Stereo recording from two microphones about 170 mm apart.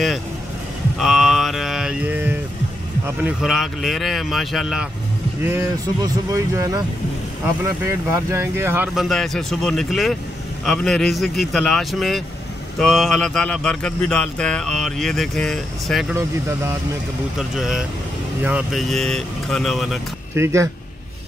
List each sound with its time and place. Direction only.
0.9 s livestock: centre (ahead or behind)
3.3 s speech: 5° right (ahead or behind)
5.4 s speech: 10° right (ahead or behind)
8.9 s speech: centre (ahead or behind)
16.2 s speech: 15° right (ahead or behind)
17.4 s speech: centre (ahead or behind)
20.3 s speech: 15° right (ahead or behind)